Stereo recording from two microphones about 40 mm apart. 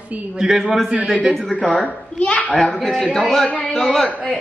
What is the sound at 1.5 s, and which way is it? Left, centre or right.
Speech, left.